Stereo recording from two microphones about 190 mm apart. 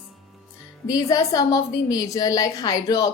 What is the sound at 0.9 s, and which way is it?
A woman's voice, 20° left (ahead or behind).